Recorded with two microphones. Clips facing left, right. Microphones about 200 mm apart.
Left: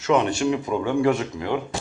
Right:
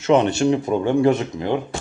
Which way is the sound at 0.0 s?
25° right (ahead or behind).